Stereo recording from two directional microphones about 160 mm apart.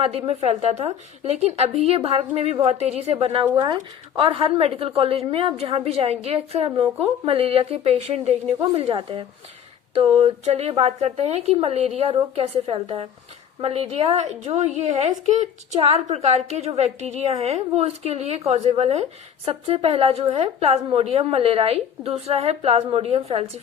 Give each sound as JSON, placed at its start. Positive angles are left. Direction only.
{"t": 0.0, "sound": "speech", "side_deg": -40}
{"t": 3.5, "sound": "a woman's voice", "side_deg": -25}